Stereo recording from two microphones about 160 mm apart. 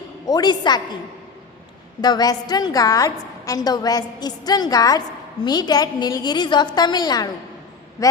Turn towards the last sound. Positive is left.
turn(degrees=25)  # may be behind; listen again after turning